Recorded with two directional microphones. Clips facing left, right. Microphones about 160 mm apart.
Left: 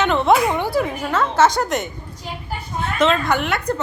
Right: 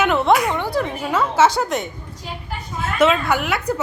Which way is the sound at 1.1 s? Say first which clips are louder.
Even; 5° right (ahead or behind).